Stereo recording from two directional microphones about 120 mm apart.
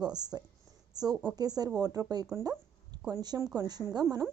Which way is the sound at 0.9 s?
35° right (ahead or behind).